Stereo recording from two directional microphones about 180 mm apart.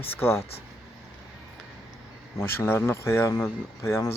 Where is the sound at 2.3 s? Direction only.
10° left (ahead or behind).